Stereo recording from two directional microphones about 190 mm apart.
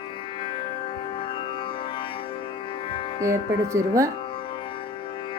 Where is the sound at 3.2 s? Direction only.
15° right (ahead or behind).